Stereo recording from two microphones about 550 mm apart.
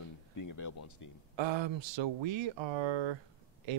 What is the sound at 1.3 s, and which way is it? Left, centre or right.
Speech, right.